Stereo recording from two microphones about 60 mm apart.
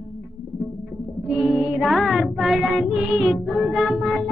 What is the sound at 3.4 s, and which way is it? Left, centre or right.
Music, centre.